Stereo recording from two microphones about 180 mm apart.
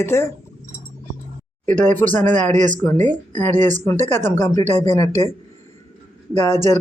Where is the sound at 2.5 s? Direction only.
45° right (ahead or behind).